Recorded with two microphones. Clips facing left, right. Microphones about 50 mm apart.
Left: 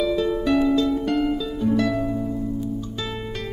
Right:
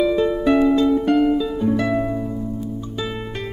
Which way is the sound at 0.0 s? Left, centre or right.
Right.